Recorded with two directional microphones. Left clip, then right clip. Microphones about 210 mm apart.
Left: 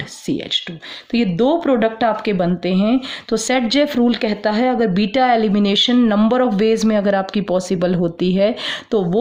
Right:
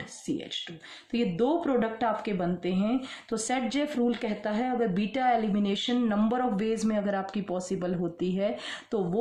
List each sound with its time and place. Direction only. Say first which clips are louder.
0.3 s speech: left 13 dB; 45° left (ahead or behind)